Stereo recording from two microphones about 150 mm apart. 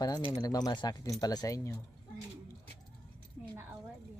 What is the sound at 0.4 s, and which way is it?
A woman's voice, 25° left (ahead or behind).